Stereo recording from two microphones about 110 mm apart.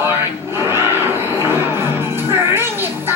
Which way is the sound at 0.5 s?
20° right (ahead or behind).